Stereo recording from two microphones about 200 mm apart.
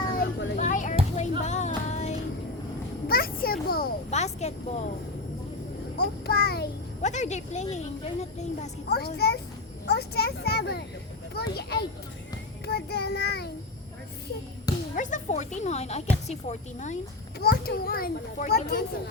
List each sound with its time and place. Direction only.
0.2 s a sound: 40° left (ahead or behind)
1.4 s music: 35° left (ahead or behind)
3.1 s a sound: 50° left (ahead or behind)
4.1 s a sound: 35° left (ahead or behind)
6.0 s a child's voice: 50° left (ahead or behind)
7.0 s speech: 35° left (ahead or behind)
8.9 s a child's voice: 55° left (ahead or behind)
12.6 s child singing: 55° left (ahead or behind)
14.9 s speech: 40° left (ahead or behind)
17.4 s a child's voice: 50° left (ahead or behind)